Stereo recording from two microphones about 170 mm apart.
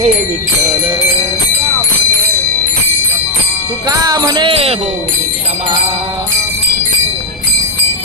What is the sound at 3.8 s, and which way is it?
Jingle bell, 20° right (ahead or behind).